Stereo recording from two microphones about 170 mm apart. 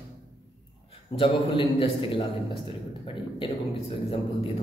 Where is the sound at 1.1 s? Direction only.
35° left (ahead or behind).